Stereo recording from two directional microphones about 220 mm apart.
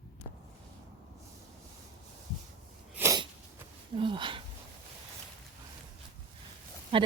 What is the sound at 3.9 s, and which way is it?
Speech, 20° right (ahead or behind).